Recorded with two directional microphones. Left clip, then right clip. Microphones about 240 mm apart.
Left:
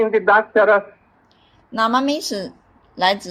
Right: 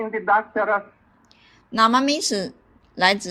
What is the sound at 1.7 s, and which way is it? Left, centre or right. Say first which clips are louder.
A woman's voice: even; right.